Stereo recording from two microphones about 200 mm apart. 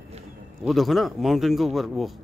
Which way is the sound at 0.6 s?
Centre (ahead or behind).